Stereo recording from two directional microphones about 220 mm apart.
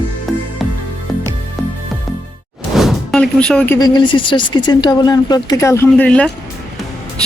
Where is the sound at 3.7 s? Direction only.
20° left (ahead or behind).